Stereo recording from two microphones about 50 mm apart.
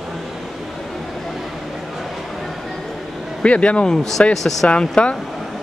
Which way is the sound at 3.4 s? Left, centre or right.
Left.